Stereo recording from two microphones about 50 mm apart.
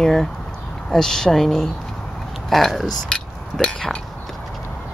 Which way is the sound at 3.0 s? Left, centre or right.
Centre.